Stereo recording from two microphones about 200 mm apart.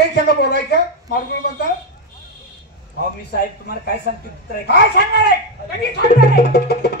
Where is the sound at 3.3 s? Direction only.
50° left (ahead or behind).